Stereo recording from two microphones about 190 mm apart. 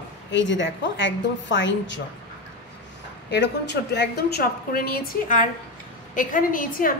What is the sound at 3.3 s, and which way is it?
A woman's voice, 65° left (ahead or behind).